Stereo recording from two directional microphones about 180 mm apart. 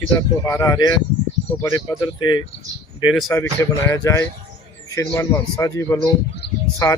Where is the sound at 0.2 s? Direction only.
15° left (ahead or behind).